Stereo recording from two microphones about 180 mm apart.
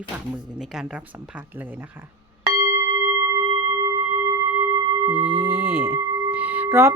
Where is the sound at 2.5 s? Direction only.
15° right (ahead or behind).